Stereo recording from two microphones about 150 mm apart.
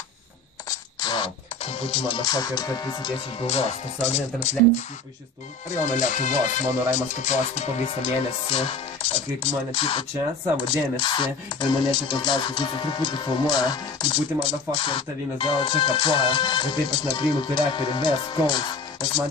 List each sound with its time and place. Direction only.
0.7 s music: 25° left (ahead or behind)
3.4 s speech: 45° left (ahead or behind)
5.9 s speech: 55° left (ahead or behind); by 19.2 s 30° left (ahead or behind)